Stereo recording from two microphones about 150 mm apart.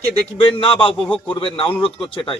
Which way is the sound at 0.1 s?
35° left (ahead or behind).